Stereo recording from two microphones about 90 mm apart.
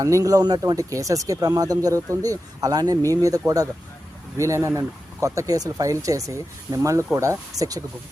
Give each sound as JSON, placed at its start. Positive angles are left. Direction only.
{"t": 0.0, "sound": "speech", "side_deg": -35}